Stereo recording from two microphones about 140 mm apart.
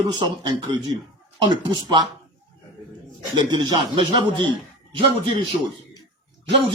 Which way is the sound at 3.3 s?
35° right (ahead or behind).